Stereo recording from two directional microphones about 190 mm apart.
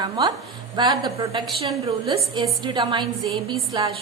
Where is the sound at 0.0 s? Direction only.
20° right (ahead or behind).